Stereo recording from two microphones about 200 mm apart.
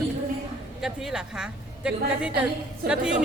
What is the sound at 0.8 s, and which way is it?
Speech, centre (ahead or behind).